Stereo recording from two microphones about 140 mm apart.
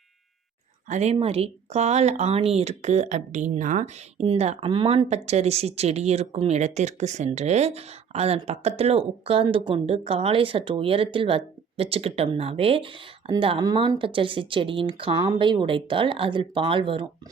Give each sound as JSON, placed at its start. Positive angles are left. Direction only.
{"t": 0.9, "sound": "speech", "side_deg": -55}
{"t": 4.7, "sound": "speech", "side_deg": -35}